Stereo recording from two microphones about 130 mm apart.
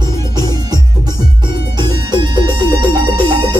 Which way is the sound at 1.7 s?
35° right (ahead or behind).